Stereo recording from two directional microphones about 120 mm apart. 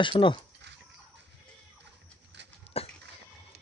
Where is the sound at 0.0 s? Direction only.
45° left (ahead or behind).